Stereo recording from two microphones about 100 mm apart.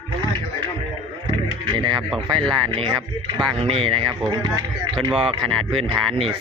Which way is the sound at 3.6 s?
70° right (ahead or behind).